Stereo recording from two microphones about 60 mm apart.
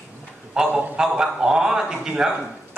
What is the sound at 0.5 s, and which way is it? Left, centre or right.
A man's voice, centre.